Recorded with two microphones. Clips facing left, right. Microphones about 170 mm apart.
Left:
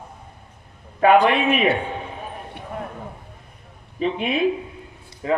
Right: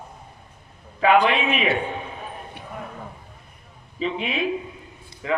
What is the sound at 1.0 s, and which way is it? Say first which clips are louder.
Speech: left 3 dB; 50° left (ahead or behind).